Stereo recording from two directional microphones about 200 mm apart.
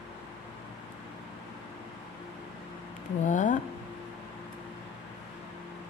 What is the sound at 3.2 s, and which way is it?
Speech, 40° left (ahead or behind).